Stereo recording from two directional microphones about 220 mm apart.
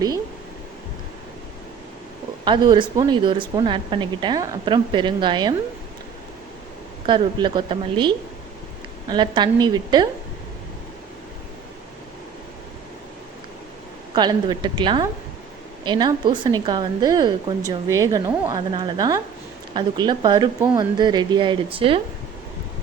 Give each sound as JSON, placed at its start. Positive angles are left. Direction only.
{"t": 2.4, "sound": "a woman's voice", "side_deg": -20}
{"t": 7.1, "sound": "a woman's voice", "side_deg": -20}
{"t": 14.2, "sound": "a woman's voice", "side_deg": -20}